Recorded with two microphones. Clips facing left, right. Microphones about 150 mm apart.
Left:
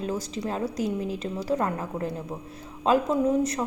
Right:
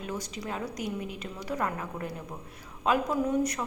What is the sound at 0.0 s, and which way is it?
A woman's voice, 30° left (ahead or behind).